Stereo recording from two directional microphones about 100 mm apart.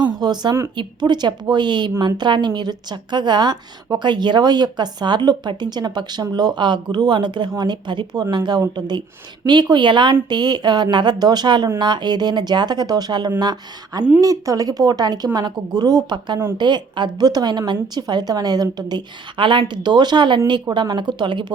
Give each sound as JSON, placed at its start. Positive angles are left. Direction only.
{"t": 0.2, "sound": "a sound", "side_deg": -45}
{"t": 0.8, "sound": "a woman's voice", "side_deg": -45}
{"t": 14.2, "sound": "a woman's voice", "side_deg": -35}